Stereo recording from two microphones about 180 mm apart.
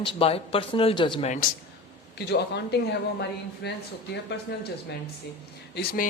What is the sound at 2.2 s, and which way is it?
Speech, 65° left (ahead or behind).